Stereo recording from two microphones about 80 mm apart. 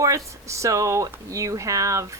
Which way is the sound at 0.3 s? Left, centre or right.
Right.